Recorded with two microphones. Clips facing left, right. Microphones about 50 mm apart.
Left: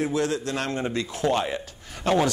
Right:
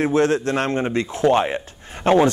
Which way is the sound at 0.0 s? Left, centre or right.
Right.